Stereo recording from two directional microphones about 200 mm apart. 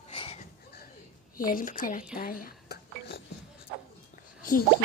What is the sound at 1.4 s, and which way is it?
Speech, 45° left (ahead or behind).